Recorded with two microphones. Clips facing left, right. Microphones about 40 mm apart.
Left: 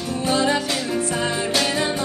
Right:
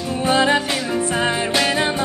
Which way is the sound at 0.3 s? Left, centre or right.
Right.